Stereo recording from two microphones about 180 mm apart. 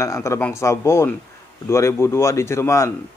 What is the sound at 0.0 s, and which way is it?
A man's voice, 15° left (ahead or behind).